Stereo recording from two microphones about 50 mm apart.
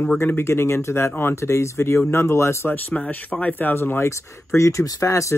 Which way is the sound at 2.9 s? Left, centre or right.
Left.